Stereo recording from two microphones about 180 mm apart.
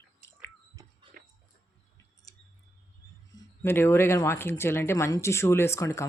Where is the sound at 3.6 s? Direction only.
15° left (ahead or behind).